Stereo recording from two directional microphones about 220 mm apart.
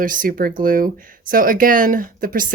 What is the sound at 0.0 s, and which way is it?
Speech, 40° right (ahead or behind).